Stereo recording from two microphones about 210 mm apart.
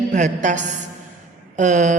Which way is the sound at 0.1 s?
35° right (ahead or behind).